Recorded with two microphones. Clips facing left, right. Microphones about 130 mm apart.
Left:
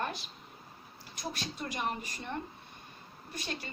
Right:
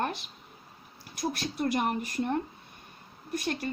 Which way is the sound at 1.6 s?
55° right (ahead or behind).